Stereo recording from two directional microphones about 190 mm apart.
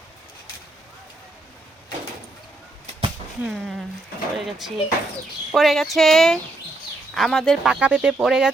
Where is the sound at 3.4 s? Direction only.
Centre (ahead or behind).